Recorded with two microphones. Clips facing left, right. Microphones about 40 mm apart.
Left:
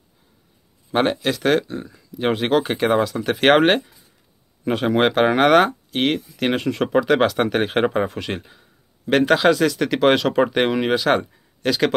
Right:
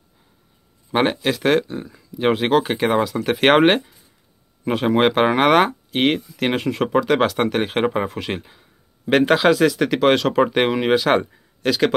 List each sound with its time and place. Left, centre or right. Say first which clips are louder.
0.9 s speech: right 1 dB; centre